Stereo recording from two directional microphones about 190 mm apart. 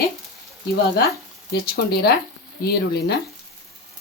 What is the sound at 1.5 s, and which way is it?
Speech, 55° left (ahead or behind).